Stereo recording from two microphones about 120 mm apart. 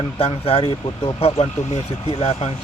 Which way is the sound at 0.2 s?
55° left (ahead or behind).